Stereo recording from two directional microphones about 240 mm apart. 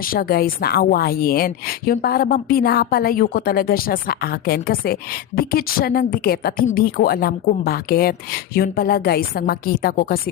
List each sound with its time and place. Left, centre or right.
0.0 s a woman's voice: left